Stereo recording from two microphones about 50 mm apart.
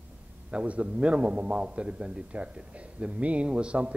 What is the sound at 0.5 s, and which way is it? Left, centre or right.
A man's voice, right.